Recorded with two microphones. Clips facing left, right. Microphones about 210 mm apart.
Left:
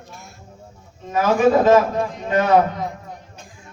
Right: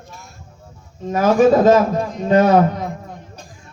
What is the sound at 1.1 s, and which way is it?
Speech, 40° right (ahead or behind).